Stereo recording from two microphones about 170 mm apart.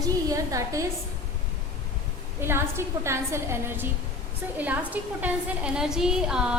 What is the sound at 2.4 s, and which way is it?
A woman's voice, 15° right (ahead or behind).